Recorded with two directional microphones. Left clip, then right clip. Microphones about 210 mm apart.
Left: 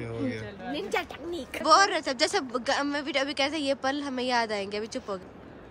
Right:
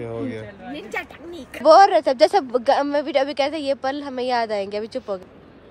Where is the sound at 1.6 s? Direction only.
5° left (ahead or behind).